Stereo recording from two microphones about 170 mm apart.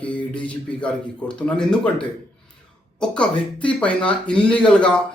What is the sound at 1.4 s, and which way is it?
Speech, 5° left (ahead or behind).